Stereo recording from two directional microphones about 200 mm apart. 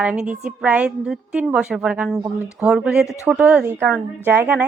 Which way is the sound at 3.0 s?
15° left (ahead or behind).